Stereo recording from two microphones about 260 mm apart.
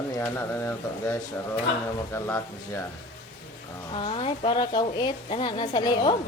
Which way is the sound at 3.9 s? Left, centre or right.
Centre.